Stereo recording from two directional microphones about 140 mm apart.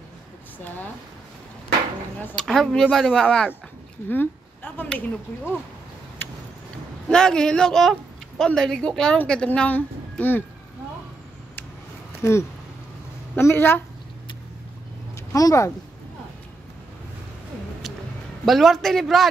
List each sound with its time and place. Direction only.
2.2 s speech: 5° left (ahead or behind)
4.7 s a woman's voice: 10° left (ahead or behind)
6.2 s vehicle: 15° left (ahead or behind)
7.1 s speech: 5° left (ahead or behind)
12.2 s a woman's voice: 20° left (ahead or behind)
15.1 s speech: 25° left (ahead or behind)
18.4 s speech: centre (ahead or behind)